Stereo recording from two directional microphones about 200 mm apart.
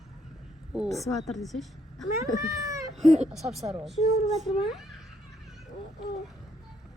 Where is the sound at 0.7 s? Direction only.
Centre (ahead or behind).